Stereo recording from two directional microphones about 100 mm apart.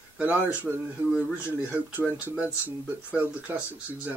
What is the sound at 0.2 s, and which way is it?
Speech, 15° right (ahead or behind).